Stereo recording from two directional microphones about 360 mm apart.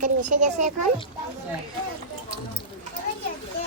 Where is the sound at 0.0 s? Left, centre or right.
Right.